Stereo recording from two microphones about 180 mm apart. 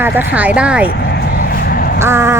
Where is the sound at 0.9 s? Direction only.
60° left (ahead or behind).